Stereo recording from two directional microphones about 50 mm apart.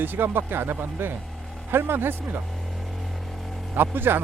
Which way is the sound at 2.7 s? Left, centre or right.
Centre.